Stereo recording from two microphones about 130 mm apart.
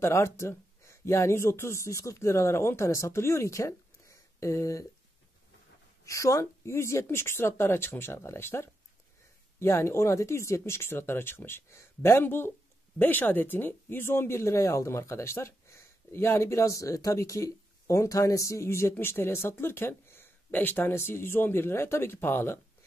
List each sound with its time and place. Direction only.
0.0 s speech: 20° left (ahead or behind)
6.0 s speech: 25° left (ahead or behind)